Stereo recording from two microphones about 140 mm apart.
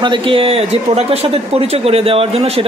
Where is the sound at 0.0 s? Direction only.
35° right (ahead or behind).